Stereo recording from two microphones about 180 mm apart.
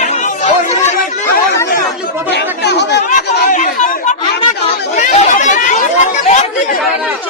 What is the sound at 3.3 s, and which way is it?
Chatter, 45° left (ahead or behind).